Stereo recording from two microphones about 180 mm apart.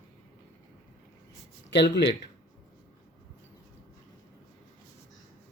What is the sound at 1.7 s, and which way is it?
Speech, 70° left (ahead or behind).